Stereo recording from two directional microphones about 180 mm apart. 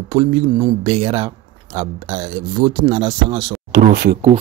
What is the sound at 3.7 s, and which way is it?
Speech, 65° right (ahead or behind).